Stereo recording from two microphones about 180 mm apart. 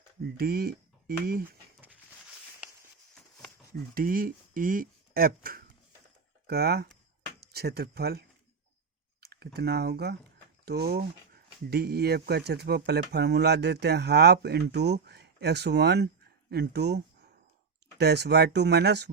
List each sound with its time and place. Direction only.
0.2 s speech: 60° right (ahead or behind)
3.9 s speech: 55° right (ahead or behind)
9.2 s speech: 60° right (ahead or behind)